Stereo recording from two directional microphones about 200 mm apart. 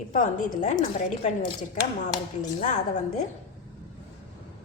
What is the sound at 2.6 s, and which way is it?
Speech, 35° left (ahead or behind).